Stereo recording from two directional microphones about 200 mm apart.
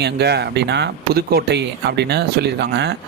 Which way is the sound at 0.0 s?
55° right (ahead or behind).